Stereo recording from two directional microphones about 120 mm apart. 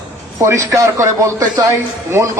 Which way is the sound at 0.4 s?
25° right (ahead or behind).